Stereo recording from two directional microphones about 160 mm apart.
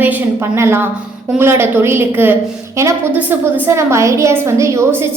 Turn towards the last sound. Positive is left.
turn(degrees=-20)  # may be behind; listen again after turning